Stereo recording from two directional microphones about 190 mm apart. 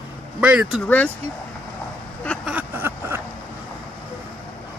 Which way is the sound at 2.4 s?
10° right (ahead or behind).